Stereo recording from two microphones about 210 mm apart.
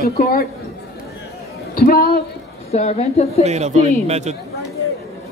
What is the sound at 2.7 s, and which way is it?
Speech, 30° left (ahead or behind).